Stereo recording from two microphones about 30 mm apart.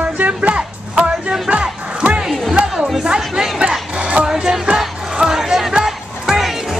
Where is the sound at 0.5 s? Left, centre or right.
Right.